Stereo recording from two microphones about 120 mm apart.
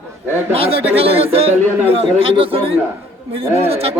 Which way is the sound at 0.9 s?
55° right (ahead or behind).